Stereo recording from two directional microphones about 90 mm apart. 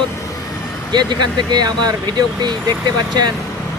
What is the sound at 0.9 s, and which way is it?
Speech, 55° right (ahead or behind).